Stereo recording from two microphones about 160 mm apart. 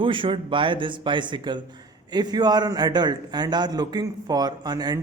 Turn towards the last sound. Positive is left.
turn(degrees=-25)  # may be behind; listen again after turning